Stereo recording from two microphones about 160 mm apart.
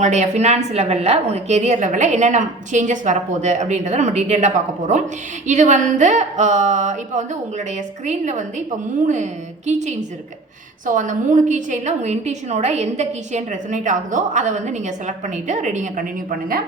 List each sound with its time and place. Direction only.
0.0 s a woman's voice: 45° right (ahead or behind); by 16.6 s 65° right (ahead or behind)